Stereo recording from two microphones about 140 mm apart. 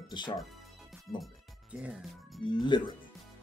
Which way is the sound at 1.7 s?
5° right (ahead or behind).